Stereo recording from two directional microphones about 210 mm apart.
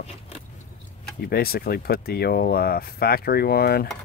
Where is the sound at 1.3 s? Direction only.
45° left (ahead or behind).